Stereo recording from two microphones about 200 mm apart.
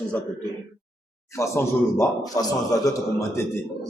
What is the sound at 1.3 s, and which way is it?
A man's voice, 15° left (ahead or behind).